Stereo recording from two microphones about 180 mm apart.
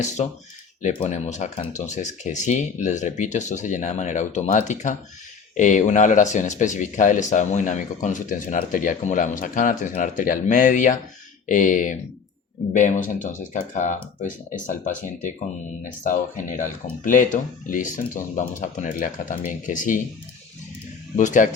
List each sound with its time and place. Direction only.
0.0 s speech: 40° left (ahead or behind)
21.2 s speech: 45° left (ahead or behind)